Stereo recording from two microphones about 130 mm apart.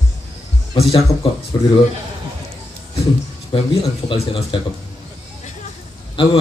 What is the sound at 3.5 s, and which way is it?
A man's voice, 40° left (ahead or behind).